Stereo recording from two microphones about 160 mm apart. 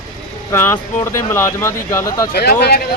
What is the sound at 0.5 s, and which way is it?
Speech, 15° left (ahead or behind).